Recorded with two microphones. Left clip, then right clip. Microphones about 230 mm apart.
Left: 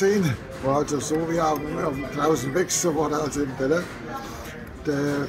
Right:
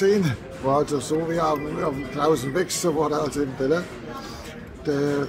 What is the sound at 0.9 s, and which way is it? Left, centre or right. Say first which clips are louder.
Speech: right 1 dB; right.